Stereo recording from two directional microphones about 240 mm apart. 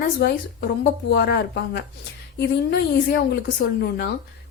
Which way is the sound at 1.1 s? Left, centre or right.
Left.